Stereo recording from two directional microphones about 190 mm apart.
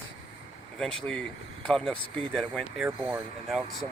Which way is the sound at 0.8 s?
5° left (ahead or behind).